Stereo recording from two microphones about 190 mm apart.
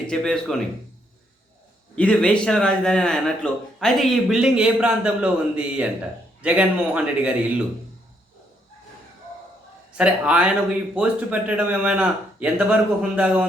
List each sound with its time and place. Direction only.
0.1 s speech: 5° left (ahead or behind)
2.0 s speech: 5° left (ahead or behind)
10.0 s speech: 5° right (ahead or behind)